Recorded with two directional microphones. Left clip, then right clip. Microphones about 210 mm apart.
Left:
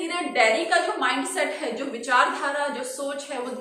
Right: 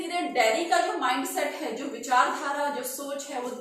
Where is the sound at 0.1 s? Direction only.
Centre (ahead or behind).